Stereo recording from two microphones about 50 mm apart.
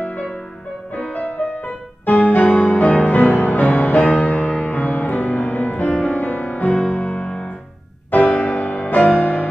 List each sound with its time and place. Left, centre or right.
0.9 s music: left